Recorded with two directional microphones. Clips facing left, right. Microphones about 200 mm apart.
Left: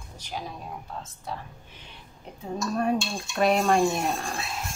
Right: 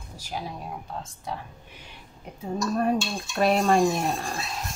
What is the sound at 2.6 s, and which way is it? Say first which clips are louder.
Speech: right 1 dB; centre (ahead or behind).